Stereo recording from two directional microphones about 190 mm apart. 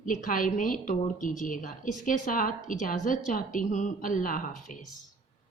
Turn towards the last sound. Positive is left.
turn(degrees=45)  # may be behind; listen again after turning